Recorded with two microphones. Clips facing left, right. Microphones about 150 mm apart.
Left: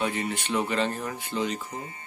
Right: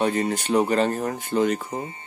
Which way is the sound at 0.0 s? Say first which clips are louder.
Right 6 dB; 45° right (ahead or behind).